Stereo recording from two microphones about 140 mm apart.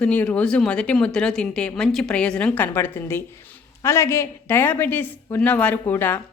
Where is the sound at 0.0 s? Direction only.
10° left (ahead or behind).